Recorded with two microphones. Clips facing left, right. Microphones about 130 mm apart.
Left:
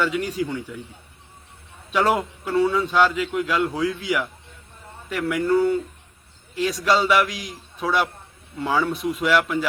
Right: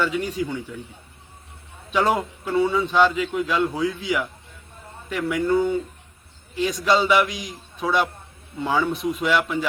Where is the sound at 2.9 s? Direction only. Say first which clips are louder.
Right 1 dB; 5° left (ahead or behind).